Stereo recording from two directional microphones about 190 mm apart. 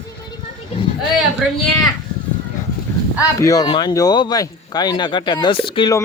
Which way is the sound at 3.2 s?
15° left (ahead or behind).